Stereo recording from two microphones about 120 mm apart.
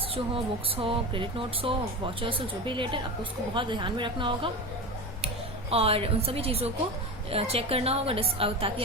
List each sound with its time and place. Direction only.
0.1 s speech: 50° right (ahead or behind)
5.7 s a woman's voice: 55° right (ahead or behind)